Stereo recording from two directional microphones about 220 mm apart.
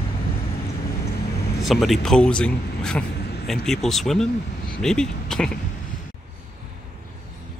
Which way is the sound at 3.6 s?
Centre (ahead or behind).